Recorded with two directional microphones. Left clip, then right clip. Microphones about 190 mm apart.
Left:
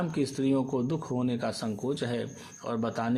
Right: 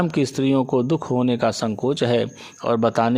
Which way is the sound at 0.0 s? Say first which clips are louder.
Right 9 dB; 45° right (ahead or behind).